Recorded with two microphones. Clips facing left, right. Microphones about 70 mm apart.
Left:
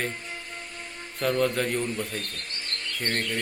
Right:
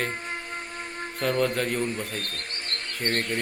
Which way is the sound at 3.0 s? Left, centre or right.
Right.